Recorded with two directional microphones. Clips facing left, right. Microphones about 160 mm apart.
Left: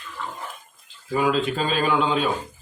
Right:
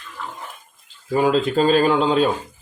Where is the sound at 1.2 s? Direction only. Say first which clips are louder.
Right 5 dB; 35° right (ahead or behind).